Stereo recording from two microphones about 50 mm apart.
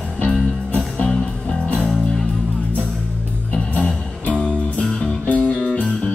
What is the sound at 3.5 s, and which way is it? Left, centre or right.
Music, left.